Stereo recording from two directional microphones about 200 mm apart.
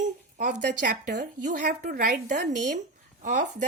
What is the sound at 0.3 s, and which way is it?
A woman's voice, 45° right (ahead or behind).